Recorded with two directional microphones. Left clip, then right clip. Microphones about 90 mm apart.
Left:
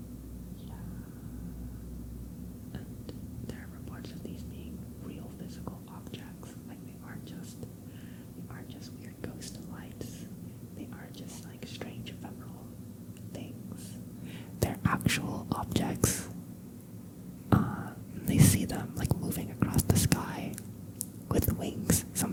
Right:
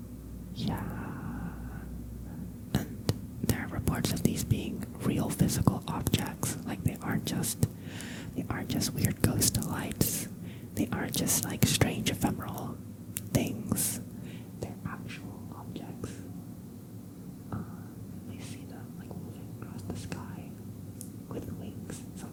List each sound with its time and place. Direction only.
2.7 s whispering: 40° right (ahead or behind)
8.4 s speech: 40° right (ahead or behind)
13.3 s whispering: 35° right (ahead or behind)
14.6 s whispering: 35° left (ahead or behind)
17.5 s a sound: 40° left (ahead or behind)
18.3 s whispering: 35° left (ahead or behind)